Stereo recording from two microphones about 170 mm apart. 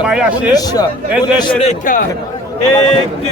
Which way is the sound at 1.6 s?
50° left (ahead or behind).